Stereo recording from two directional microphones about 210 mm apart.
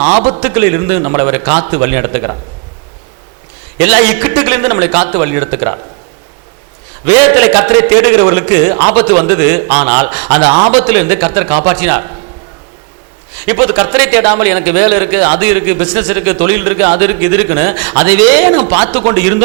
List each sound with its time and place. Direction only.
0.2 s a man's voice: 35° right (ahead or behind)
0.4 s a man's voice: 15° right (ahead or behind)
3.8 s a man's voice: 10° right (ahead or behind)
7.0 s a man's voice: 10° right (ahead or behind)
13.4 s a man's voice: 15° right (ahead or behind)